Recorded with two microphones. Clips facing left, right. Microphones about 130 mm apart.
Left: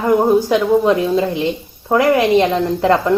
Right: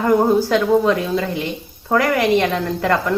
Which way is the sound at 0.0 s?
20° left (ahead or behind).